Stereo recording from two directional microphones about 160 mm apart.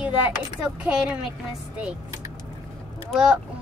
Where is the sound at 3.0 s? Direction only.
Centre (ahead or behind).